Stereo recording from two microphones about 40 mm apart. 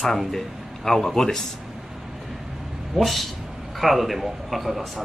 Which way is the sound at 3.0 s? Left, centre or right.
Centre.